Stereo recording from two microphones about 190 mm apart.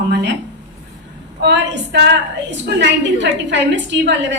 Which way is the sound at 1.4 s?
65° right (ahead or behind).